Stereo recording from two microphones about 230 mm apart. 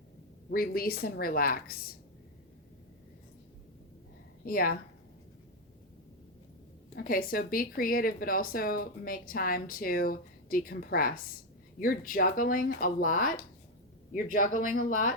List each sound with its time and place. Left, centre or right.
0.5 s a woman's voice: left
4.4 s a woman's voice: left
6.9 s a woman's voice: left